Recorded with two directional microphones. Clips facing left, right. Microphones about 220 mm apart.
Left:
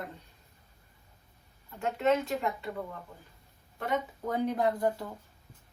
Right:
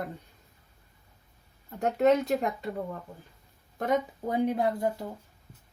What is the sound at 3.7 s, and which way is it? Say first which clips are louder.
Speech: right 5 dB; 40° right (ahead or behind).